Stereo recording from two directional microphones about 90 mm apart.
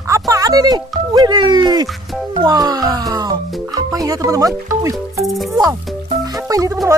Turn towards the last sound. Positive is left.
turn(degrees=-40)  # may be behind; listen again after turning